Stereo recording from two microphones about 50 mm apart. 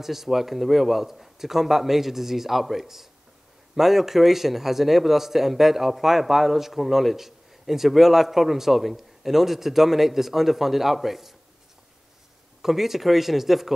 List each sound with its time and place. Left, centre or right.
0.0 s a man's voice: centre
12.6 s a man's voice: centre